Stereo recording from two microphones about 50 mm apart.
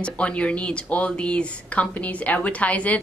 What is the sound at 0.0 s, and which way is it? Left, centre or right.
Speech, left.